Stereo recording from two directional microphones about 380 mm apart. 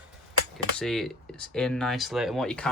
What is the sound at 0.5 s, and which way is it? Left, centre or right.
Speech, centre.